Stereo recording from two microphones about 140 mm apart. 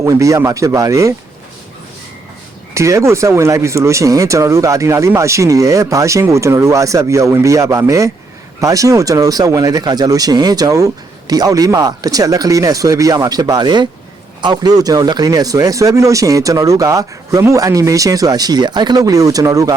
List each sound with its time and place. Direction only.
0.0 s speech: 20° right (ahead or behind)
2.7 s speech: 20° right (ahead or behind)